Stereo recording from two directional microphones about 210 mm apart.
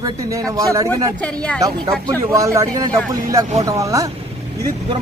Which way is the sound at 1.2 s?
5° left (ahead or behind).